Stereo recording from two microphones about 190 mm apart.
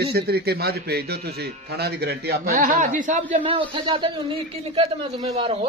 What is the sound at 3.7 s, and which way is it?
Speech, 25° right (ahead or behind).